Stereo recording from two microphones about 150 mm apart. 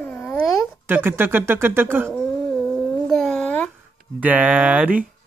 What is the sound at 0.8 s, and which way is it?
Speech, 15° right (ahead or behind).